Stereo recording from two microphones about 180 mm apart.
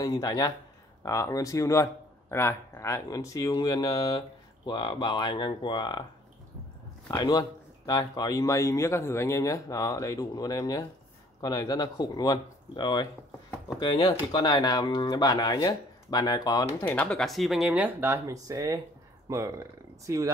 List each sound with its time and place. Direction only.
0.0 s speech: 20° left (ahead or behind)
7.1 s speech: 20° left (ahead or behind)
16.8 s speech: 5° left (ahead or behind); by 20.2 s 15° right (ahead or behind)